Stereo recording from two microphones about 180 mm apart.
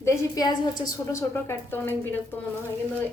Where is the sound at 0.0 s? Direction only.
20° left (ahead or behind).